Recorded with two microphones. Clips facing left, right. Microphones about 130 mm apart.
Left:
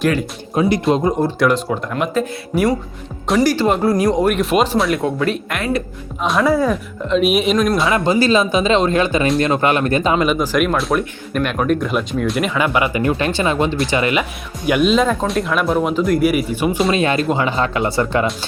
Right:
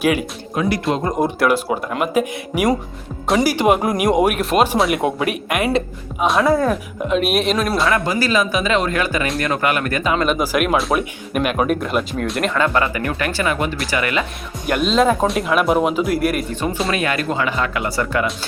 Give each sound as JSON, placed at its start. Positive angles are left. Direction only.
{"t": 0.0, "sound": "speech", "side_deg": -10}
{"t": 0.5, "sound": "speech", "side_deg": 30}
{"t": 1.4, "sound": "speech", "side_deg": -10}
{"t": 3.2, "sound": "speech", "side_deg": 0}
{"t": 3.5, "sound": "speech", "side_deg": -10}
{"t": 4.4, "sound": "speech", "side_deg": 0}
{"t": 4.9, "sound": "speech", "side_deg": -15}
{"t": 6.1, "sound": "speech", "side_deg": 0}
{"t": 7.9, "sound": "speech", "side_deg": 25}
{"t": 10.2, "sound": "speech", "side_deg": -5}
{"t": 12.5, "sound": "speech", "side_deg": 10}
{"t": 14.7, "sound": "speech", "side_deg": 5}
{"t": 16.9, "sound": "speech", "side_deg": 25}